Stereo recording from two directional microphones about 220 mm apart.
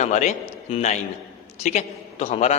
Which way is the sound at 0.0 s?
30° left (ahead or behind).